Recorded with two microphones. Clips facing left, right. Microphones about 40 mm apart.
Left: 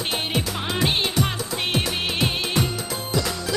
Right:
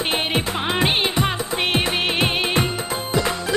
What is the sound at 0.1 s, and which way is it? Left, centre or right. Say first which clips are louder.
Music: right 2 dB; right.